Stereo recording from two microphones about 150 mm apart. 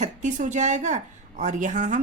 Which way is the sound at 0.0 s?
55° right (ahead or behind).